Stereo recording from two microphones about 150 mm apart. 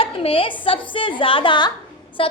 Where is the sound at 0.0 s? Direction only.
40° left (ahead or behind).